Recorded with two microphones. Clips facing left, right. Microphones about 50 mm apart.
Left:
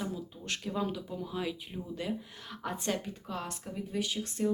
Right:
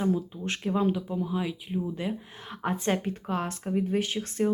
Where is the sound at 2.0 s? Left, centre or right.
Right.